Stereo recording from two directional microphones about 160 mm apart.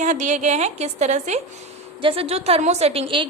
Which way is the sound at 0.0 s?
50° right (ahead or behind).